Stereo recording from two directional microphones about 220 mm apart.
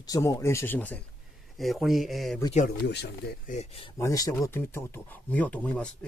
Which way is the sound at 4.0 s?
15° left (ahead or behind).